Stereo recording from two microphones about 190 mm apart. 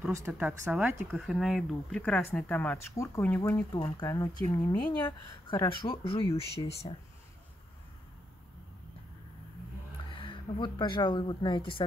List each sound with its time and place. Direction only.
0.1 s speech: 10° right (ahead or behind); by 7.0 s 30° left (ahead or behind)
10.1 s a woman's voice: 25° left (ahead or behind)